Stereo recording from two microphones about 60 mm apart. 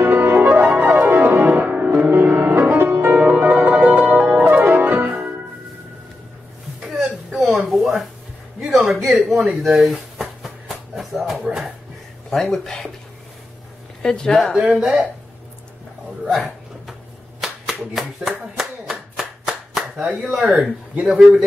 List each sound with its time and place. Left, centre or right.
0.0 s music: right
1.7 s music: right
5.1 s keyboard: centre
6.8 s a sound: centre
12.3 s speech: centre
14.0 s speech: centre
14.8 s speech: centre
17.4 s clapping: centre
20.2 s speech: centre
20.9 s speech: centre